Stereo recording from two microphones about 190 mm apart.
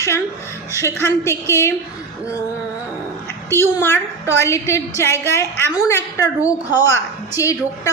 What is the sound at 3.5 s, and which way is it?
A woman's voice, 10° left (ahead or behind).